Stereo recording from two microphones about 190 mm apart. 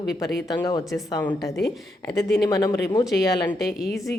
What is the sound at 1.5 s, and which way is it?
Speech, centre (ahead or behind).